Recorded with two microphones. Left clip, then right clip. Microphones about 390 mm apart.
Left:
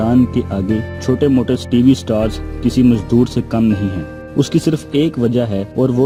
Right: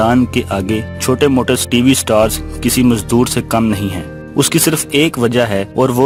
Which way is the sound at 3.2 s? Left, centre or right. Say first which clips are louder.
Right 2 dB; centre.